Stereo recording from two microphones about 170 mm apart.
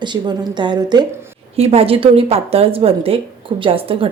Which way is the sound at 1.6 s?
35° right (ahead or behind).